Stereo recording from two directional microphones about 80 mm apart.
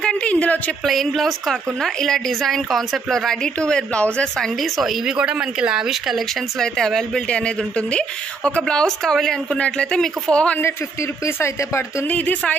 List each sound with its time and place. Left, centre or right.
0.0 s a sound: centre
0.8 s a woman's voice: centre
4.6 s speech: centre
6.6 s speech: centre
11.2 s speech: left
12.1 s speech: centre